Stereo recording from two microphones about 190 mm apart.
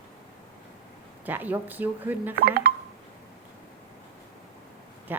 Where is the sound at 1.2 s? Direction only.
10° right (ahead or behind).